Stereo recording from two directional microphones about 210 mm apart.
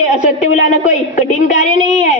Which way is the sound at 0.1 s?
35° left (ahead or behind).